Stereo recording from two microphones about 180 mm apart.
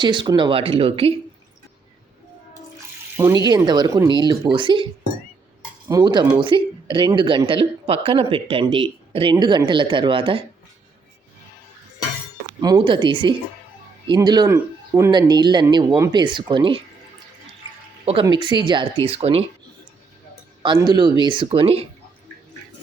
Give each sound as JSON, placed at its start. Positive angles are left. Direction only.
{"t": 0.0, "sound": "speech", "side_deg": -25}
{"t": 3.2, "sound": "speech", "side_deg": -20}
{"t": 5.9, "sound": "speech", "side_deg": -20}
{"t": 12.5, "sound": "speech", "side_deg": -25}
{"t": 18.0, "sound": "speech", "side_deg": -30}
{"t": 20.6, "sound": "speech", "side_deg": -25}